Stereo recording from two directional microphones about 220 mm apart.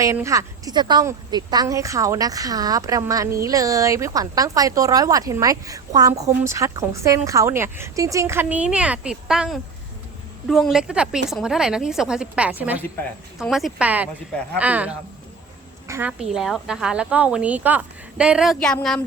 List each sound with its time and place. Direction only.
0.0 s a woman's voice: 15° right (ahead or behind); by 19.0 s 5° left (ahead or behind)